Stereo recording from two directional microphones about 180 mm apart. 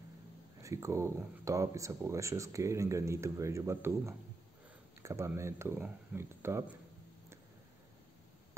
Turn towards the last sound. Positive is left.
turn(degrees=-15)  # may be behind; listen again after turning